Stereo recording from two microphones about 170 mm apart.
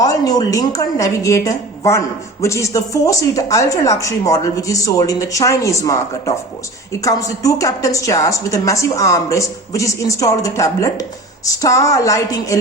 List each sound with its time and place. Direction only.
0.0 s a woman's voice: 20° left (ahead or behind)